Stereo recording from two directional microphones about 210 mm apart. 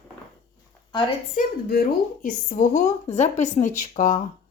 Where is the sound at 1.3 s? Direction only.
45° left (ahead or behind).